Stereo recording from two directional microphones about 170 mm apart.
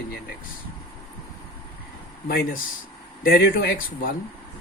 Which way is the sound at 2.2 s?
65° left (ahead or behind).